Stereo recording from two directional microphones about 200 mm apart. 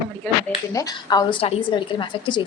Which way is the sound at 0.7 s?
20° left (ahead or behind).